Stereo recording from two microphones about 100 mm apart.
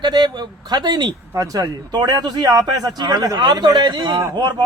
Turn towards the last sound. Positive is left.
turn(degrees=-45)  # may be behind; listen again after turning